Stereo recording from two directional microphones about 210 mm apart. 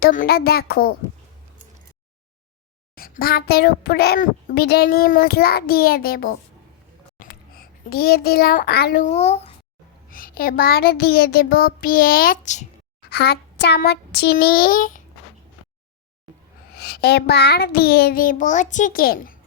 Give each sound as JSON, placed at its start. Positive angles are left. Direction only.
{"t": 0.0, "sound": "a child's voice", "side_deg": 40}
{"t": 2.9, "sound": "a child's voice", "side_deg": 45}
{"t": 10.1, "sound": "a child's voice", "side_deg": 40}
{"t": 13.1, "sound": "a child's voice", "side_deg": 50}
{"t": 16.7, "sound": "a child's voice", "side_deg": 50}